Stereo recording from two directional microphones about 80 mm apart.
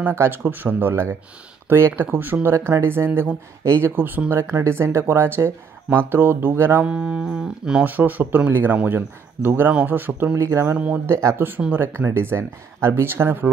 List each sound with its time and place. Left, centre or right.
0.1 s speech: right
6.8 s a sound: centre
7.8 s speech: right
10.3 s speech: right